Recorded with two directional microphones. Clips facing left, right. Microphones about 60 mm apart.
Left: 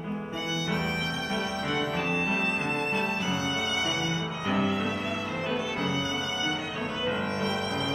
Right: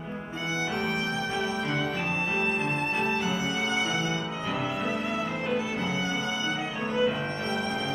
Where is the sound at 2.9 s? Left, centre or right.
Right.